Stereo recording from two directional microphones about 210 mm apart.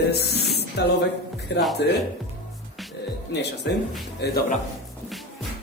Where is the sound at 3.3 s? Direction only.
55° left (ahead or behind).